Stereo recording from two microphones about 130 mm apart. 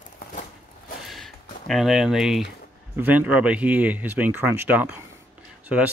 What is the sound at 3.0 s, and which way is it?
Speech, 15° right (ahead or behind).